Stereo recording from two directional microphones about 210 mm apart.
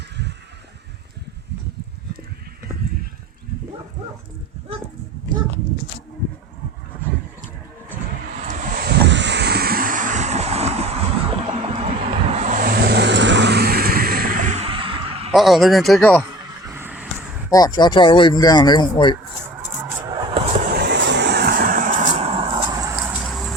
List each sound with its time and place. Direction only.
8.4 s vehicle: 50° right (ahead or behind); by 10.8 s 30° right (ahead or behind)
11.3 s music: 30° right (ahead or behind)
12.3 s vehicle: 35° right (ahead or behind)
15.3 s speech: centre (ahead or behind)
16.4 s a sound: 15° right (ahead or behind)
17.5 s speech: 20° left (ahead or behind)
20.0 s vehicle: 20° right (ahead or behind)
20.7 s vehicle: 50° right (ahead or behind); by 23.0 s 15° right (ahead or behind)
23.0 s a sound: centre (ahead or behind)